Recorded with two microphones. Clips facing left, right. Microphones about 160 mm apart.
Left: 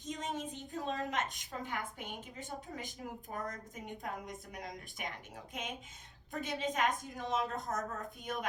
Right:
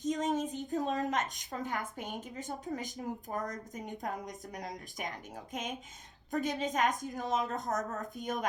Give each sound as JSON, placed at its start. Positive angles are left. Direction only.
{"t": 0.0, "sound": "a woman's voice", "side_deg": -45}